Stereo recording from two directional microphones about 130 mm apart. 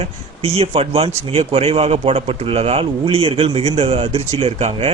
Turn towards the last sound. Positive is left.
turn(degrees=-60)  # may be behind; listen again after turning